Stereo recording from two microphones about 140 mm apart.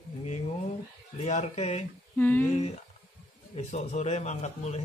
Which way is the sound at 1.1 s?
55° left (ahead or behind).